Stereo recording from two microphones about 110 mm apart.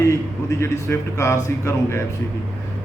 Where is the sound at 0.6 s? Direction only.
25° left (ahead or behind).